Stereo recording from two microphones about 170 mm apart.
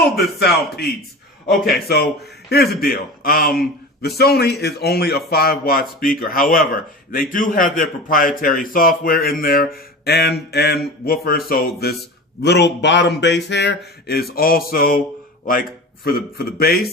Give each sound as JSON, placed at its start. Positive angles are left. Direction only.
{"t": 0.2, "sound": "a man's voice", "side_deg": 70}
{"t": 12.4, "sound": "speech", "side_deg": 85}
{"t": 16.0, "sound": "a man's voice", "side_deg": 65}